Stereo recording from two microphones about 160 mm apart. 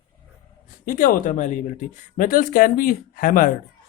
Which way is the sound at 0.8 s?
60° left (ahead or behind).